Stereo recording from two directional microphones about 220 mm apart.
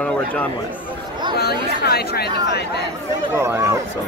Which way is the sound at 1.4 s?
45° left (ahead or behind).